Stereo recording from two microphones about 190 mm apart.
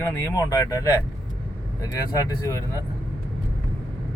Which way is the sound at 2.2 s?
15° left (ahead or behind).